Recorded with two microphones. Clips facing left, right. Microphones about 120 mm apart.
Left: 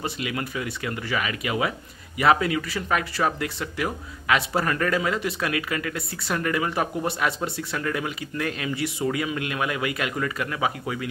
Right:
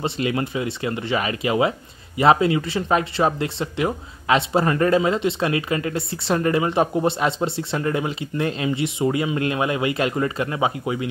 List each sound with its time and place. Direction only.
0.0 s speech: 30° right (ahead or behind)